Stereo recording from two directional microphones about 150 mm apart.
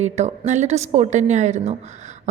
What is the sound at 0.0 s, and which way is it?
A woman's voice, 50° right (ahead or behind).